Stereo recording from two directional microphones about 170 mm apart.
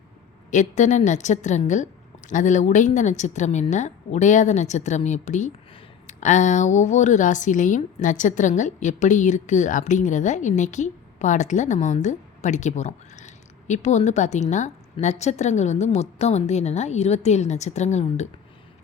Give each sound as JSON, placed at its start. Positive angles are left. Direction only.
{"t": 0.5, "sound": "a woman's voice", "side_deg": 45}